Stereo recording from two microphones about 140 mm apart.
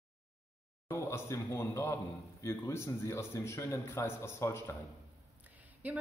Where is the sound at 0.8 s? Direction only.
20° left (ahead or behind).